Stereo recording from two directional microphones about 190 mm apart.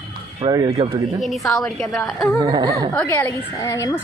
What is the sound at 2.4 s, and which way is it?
Speech, 20° right (ahead or behind).